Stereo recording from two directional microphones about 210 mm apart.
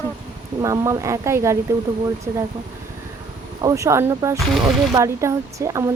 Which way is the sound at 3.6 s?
15° right (ahead or behind).